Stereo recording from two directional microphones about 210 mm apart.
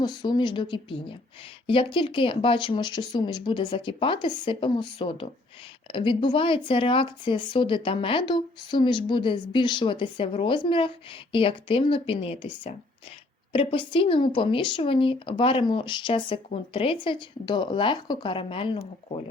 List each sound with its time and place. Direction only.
0.0 s speech: 20° left (ahead or behind)